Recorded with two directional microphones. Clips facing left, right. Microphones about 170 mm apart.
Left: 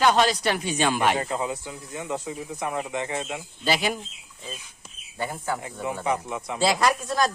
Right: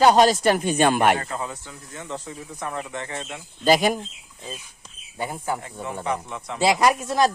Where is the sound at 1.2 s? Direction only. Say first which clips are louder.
Left 3 dB; 15° left (ahead or behind).